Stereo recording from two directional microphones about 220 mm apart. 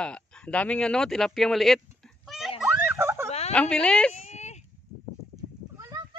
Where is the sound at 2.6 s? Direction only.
10° right (ahead or behind).